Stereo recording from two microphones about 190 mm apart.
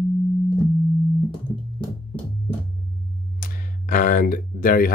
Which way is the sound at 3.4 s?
45° left (ahead or behind).